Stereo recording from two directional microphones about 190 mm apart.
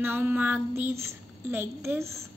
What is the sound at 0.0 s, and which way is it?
Speech, 10° right (ahead or behind).